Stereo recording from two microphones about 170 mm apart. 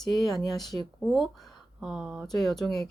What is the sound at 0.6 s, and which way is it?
Speech, 25° left (ahead or behind).